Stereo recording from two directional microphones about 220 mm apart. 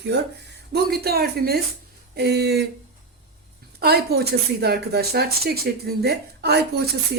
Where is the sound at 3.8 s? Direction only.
45° right (ahead or behind).